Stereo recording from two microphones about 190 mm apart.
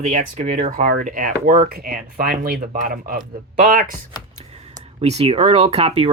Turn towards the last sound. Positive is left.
turn(degrees=-30)  # may be behind; listen again after turning